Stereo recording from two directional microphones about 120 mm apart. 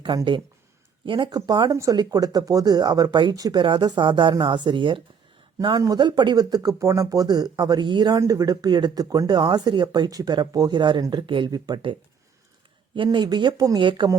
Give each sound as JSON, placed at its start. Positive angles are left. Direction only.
{"t": 1.0, "sound": "speech", "side_deg": -45}
{"t": 5.5, "sound": "speech", "side_deg": -30}
{"t": 8.2, "sound": "speech", "side_deg": -30}
{"t": 13.0, "sound": "speech", "side_deg": -40}